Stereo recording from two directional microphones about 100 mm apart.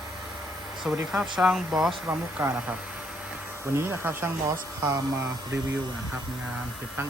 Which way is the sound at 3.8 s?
20° right (ahead or behind).